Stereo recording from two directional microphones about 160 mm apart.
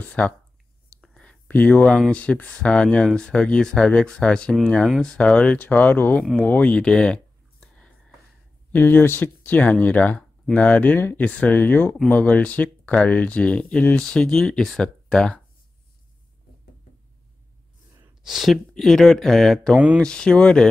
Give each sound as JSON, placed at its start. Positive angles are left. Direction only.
{"t": 0.0, "sound": "speech", "side_deg": 5}
{"t": 1.0, "sound": "a sound", "side_deg": 5}
{"t": 2.0, "sound": "speech", "side_deg": 10}
{"t": 7.6, "sound": "a sound", "side_deg": 5}
{"t": 8.7, "sound": "speech", "side_deg": 10}
{"t": 18.2, "sound": "speech", "side_deg": 0}